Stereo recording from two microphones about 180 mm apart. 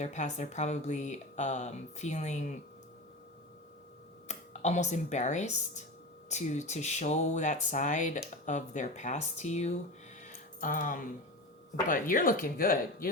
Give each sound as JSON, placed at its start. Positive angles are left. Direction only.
{"t": 0.0, "sound": "speech", "side_deg": 40}
{"t": 4.3, "sound": "speech", "side_deg": 40}
{"t": 10.2, "sound": "music", "side_deg": 45}
{"t": 11.9, "sound": "speech", "side_deg": 50}